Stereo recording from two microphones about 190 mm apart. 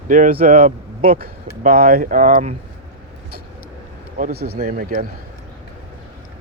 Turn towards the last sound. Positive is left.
turn(degrees=-45)  # may be behind; listen again after turning